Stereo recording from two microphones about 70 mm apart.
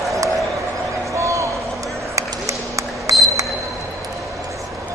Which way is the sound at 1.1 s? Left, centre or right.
Right.